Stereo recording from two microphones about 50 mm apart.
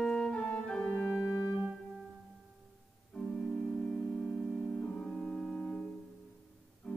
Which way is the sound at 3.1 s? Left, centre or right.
Centre.